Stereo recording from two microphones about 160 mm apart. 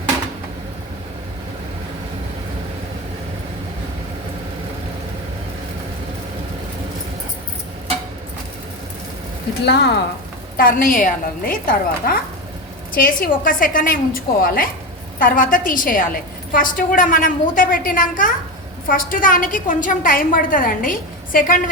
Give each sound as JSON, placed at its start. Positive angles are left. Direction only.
{"t": 9.6, "sound": "speech", "side_deg": 90}
{"t": 10.6, "sound": "a woman's voice", "side_deg": 60}